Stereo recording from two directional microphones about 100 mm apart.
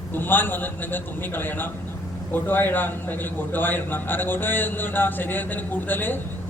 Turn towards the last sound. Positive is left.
turn(degrees=20)  # may be behind; listen again after turning